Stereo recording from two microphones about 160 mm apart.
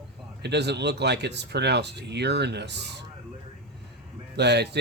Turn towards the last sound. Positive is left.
turn(degrees=-90)